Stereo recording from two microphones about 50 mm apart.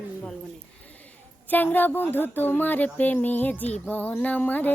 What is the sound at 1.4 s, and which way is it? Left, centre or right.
A woman's voice, left.